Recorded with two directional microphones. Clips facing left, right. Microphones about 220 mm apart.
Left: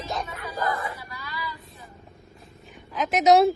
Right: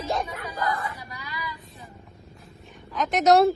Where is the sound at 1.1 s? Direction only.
15° right (ahead or behind).